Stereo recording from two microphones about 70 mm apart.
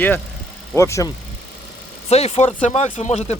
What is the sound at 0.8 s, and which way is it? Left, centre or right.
Speech, left.